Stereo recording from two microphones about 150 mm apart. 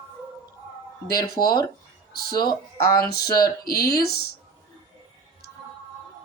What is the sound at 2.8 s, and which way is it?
Speech, 90° left.